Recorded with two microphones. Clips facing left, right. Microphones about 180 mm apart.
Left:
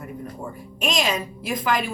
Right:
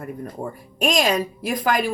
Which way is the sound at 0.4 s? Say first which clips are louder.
Right 6 dB; 35° right (ahead or behind).